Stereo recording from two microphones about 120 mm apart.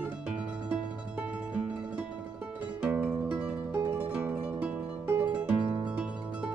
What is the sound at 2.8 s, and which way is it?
Music, 15° right (ahead or behind).